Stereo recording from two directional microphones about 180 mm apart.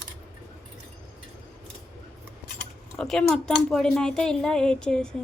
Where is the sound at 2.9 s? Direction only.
Centre (ahead or behind).